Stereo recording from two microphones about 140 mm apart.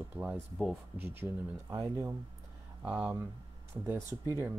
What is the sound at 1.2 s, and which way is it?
Speech, 25° right (ahead or behind).